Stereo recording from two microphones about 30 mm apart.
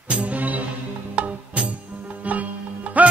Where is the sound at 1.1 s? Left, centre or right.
Right.